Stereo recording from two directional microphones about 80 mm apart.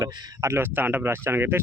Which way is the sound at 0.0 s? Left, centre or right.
Right.